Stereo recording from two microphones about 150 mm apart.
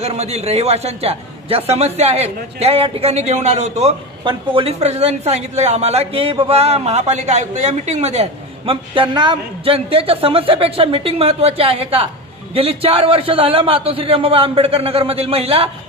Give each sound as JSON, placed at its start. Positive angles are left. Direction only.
{"t": 0.0, "sound": "a man's voice", "side_deg": -45}
{"t": 4.2, "sound": "a woman's voice", "side_deg": -35}